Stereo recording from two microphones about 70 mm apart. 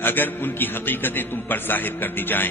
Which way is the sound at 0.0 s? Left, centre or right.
Left.